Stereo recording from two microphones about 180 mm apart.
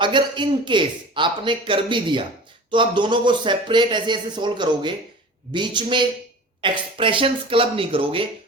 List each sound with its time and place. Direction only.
0.0 s speech: 25° right (ahead or behind)